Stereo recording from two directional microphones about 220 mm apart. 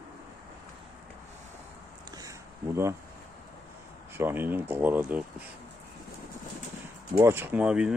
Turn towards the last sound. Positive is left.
turn(degrees=-5)  # may be behind; listen again after turning